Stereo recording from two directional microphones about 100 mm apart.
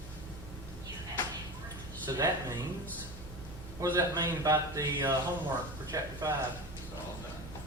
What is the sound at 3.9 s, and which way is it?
A man's voice, 40° right (ahead or behind).